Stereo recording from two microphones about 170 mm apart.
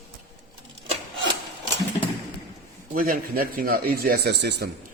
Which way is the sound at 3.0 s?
55° right (ahead or behind).